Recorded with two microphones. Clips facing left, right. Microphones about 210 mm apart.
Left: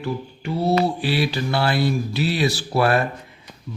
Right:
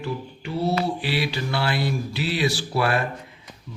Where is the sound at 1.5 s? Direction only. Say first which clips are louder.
Left 4 dB; 40° left (ahead or behind).